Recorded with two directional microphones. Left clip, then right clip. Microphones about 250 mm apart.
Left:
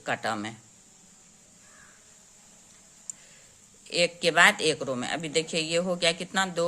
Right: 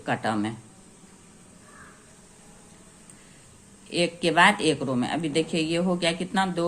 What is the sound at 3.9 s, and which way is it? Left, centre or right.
Speech, left.